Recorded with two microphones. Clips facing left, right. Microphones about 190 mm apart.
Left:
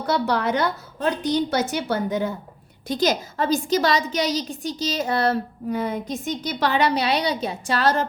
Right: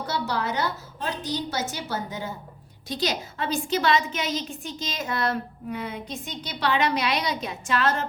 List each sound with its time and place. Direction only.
0.1 s a woman's voice: 60° left (ahead or behind)
2.8 s a woman's voice: 50° left (ahead or behind)